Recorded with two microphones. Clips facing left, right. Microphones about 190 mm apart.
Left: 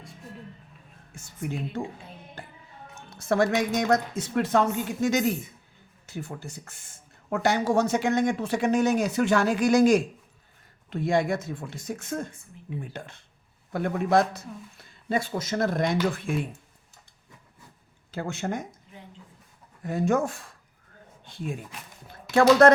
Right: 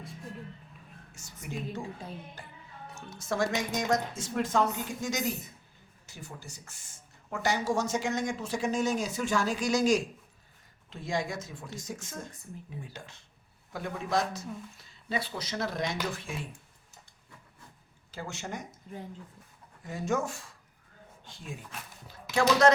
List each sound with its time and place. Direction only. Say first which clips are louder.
1.1 s a woman's voice: left 6 dB; 55° left (ahead or behind)
2.4 s music: left 5 dB; 55° left (ahead or behind)
2.9 s speech: left 8 dB; 60° left (ahead or behind)
18.1 s speech: left 8 dB; 60° left (ahead or behind)
18.9 s speech: right 6 dB; 45° right (ahead or behind)
19.8 s speech: left 7 dB; 60° left (ahead or behind)
22.0 s speech: left 8 dB; 55° left (ahead or behind)